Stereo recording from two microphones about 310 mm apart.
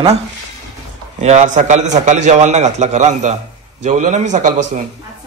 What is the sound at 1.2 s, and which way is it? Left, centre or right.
A man's voice, right.